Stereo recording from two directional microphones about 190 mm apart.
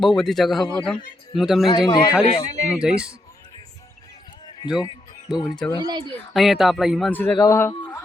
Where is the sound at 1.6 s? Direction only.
20° left (ahead or behind).